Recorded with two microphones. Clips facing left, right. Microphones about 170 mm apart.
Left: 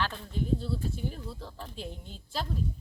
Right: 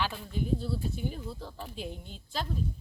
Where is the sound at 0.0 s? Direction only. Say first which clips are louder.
Even; 5° right (ahead or behind).